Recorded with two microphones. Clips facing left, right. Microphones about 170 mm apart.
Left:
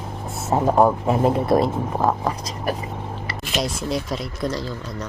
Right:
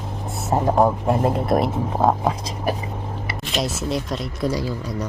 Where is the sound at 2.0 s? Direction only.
15° right (ahead or behind).